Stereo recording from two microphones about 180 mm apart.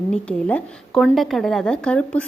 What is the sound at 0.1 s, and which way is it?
A woman's voice, 5° left (ahead or behind).